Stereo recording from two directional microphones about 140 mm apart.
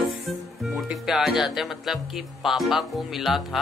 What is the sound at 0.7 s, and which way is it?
A woman's voice, centre (ahead or behind).